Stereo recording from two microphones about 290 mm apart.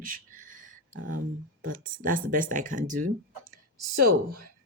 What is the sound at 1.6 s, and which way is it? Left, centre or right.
Speech, right.